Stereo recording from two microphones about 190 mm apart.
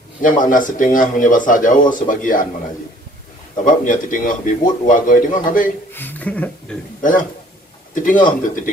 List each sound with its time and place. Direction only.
0.2 s a man's voice: 45° left (ahead or behind)
3.6 s a man's voice: 45° left (ahead or behind)
5.9 s speech: 10° left (ahead or behind)
8.0 s a man's voice: 45° left (ahead or behind)